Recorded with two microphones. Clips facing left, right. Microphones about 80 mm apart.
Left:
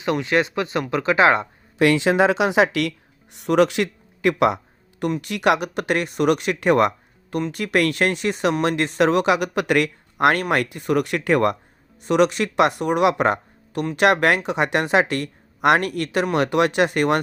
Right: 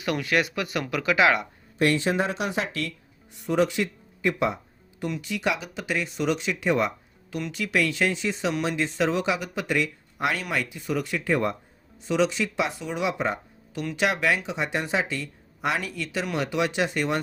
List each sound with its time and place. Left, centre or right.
0.0 s speech: left
1.8 s speech: left
3.3 s speech: left
12.0 s speech: left